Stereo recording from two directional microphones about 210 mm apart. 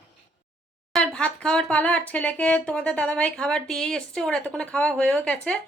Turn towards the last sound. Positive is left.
turn(degrees=5)  # may be behind; listen again after turning